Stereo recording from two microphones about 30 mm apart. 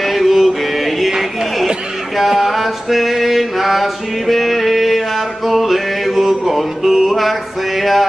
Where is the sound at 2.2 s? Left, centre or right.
Centre.